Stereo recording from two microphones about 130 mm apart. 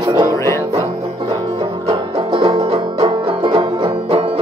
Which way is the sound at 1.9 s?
45° right (ahead or behind).